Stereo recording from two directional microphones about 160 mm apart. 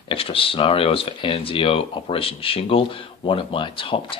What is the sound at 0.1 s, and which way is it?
Speech, 35° left (ahead or behind).